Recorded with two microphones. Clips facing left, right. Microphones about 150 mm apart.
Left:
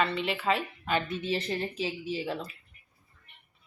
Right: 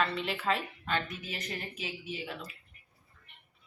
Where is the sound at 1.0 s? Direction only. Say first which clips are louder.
Left 10 dB; 30° left (ahead or behind).